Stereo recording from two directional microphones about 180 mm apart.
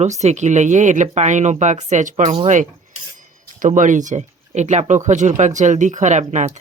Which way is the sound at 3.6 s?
45° right (ahead or behind).